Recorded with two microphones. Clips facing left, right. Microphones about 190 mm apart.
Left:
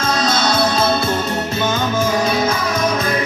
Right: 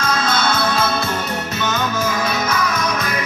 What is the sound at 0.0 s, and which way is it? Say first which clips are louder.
Music: left 2 dB; 30° left (ahead or behind).